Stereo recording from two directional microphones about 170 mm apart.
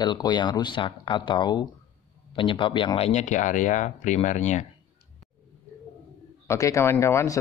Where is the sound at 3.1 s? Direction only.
45° left (ahead or behind).